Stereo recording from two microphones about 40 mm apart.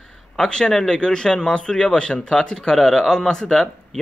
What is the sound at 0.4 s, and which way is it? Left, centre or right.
A man's voice, centre.